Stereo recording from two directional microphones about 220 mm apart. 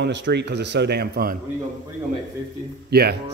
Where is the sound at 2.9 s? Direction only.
45° right (ahead or behind).